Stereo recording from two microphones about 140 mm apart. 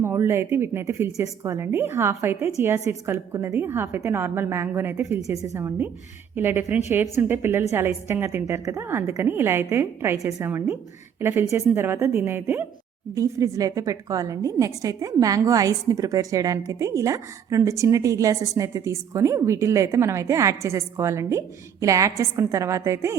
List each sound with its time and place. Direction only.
0.0 s a woman's voice: 20° right (ahead or behind)